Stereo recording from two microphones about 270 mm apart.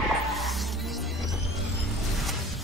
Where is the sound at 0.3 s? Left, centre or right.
Centre.